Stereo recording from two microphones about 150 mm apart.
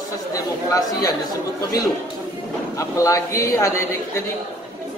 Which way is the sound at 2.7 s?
20° left (ahead or behind).